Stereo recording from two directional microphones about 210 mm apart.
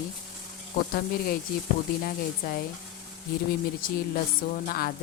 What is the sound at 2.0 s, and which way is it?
Speech, 45° left (ahead or behind).